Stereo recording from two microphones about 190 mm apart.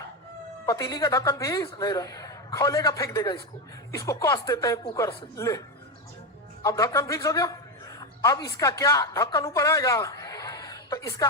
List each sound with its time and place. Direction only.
0.6 s a woman's voice: 15° left (ahead or behind)